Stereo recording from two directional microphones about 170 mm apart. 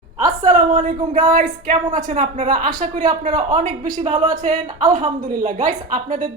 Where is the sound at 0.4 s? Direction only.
50° right (ahead or behind).